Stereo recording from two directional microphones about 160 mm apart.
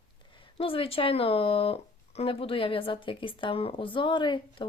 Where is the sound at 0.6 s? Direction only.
35° left (ahead or behind).